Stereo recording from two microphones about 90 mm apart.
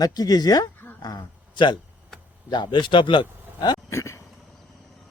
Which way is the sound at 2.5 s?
55° left (ahead or behind).